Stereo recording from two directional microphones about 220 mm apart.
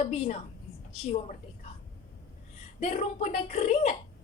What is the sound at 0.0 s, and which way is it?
Speech, 30° left (ahead or behind).